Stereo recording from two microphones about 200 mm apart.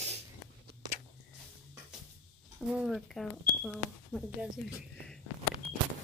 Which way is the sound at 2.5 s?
5° right (ahead or behind).